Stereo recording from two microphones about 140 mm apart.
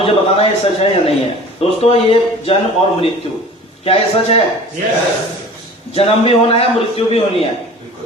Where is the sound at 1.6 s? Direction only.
45° left (ahead or behind).